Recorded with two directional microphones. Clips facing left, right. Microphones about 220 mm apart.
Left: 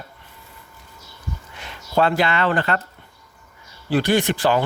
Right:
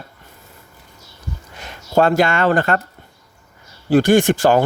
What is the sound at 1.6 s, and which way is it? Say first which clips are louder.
Speech: right 4 dB; 45° right (ahead or behind).